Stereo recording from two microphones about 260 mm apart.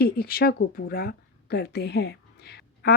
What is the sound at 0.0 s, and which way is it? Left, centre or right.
A woman's voice, left.